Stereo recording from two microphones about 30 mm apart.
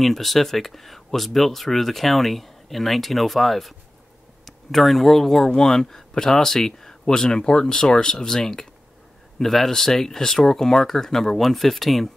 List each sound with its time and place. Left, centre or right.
0.0 s speech: centre
9.4 s speech: centre